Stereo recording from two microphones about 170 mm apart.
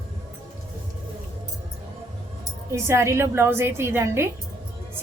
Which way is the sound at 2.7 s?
15° right (ahead or behind).